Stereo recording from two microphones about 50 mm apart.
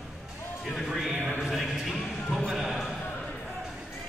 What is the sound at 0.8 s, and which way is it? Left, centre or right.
Speech, centre.